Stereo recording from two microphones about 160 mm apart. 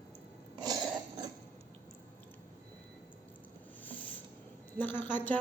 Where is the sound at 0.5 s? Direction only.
25° right (ahead or behind).